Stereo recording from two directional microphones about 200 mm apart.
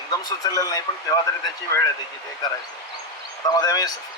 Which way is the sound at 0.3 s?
20° left (ahead or behind).